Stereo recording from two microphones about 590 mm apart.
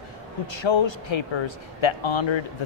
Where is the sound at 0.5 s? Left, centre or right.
Left.